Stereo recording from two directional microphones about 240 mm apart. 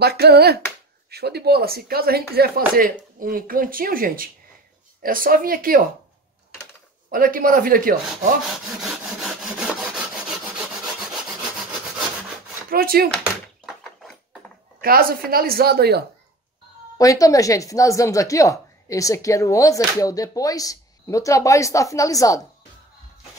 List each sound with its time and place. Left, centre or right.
0.0 s speech: right
7.1 s speech: right
8.8 s sawing: centre
12.6 s speech: right
13.2 s door: centre
14.8 s speech: right
17.0 s a woman's voice: centre